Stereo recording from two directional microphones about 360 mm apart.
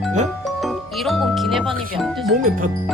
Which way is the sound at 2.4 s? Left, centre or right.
Right.